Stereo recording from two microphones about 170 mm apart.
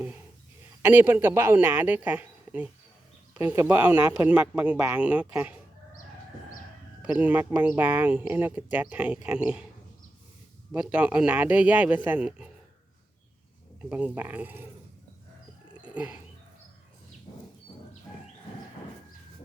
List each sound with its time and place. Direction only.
0.8 s speech: 10° right (ahead or behind)
7.0 s speech: 10° right (ahead or behind)
10.7 s speech: 5° right (ahead or behind)
13.9 s speech: 10° right (ahead or behind)
15.7 s wild animals: 5° right (ahead or behind)